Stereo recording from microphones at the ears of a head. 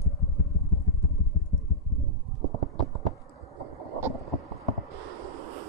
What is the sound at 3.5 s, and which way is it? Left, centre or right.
Boat, right.